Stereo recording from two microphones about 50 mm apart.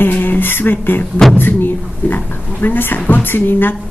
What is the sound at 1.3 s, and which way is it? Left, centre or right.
Speech, left.